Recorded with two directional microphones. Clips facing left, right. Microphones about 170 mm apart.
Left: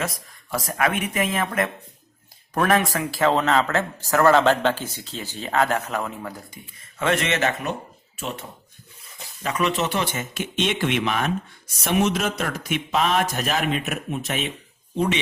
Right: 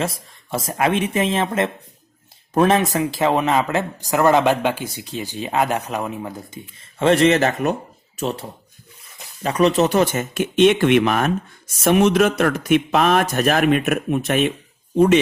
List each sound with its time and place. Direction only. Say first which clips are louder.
0.0 s a man's voice: right 4 dB; 25° right (ahead or behind); by 15.2 s 50° right (ahead or behind)